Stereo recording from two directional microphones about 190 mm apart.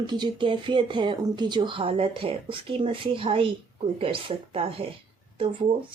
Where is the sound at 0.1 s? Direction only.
25° right (ahead or behind).